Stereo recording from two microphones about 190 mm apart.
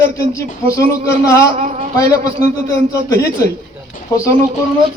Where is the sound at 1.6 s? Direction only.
35° right (ahead or behind).